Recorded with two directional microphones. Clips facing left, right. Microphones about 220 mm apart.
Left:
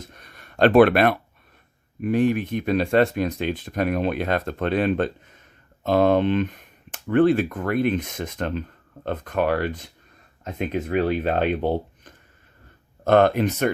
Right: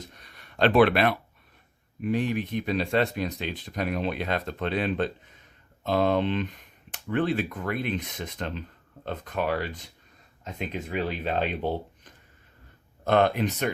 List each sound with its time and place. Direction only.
0.1 s a sound: 50° left (ahead or behind)
2.0 s speech: 50° left (ahead or behind)
13.1 s speech: 50° left (ahead or behind)